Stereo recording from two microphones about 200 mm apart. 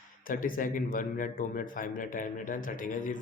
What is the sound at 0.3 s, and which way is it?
A man's voice, 45° left (ahead or behind).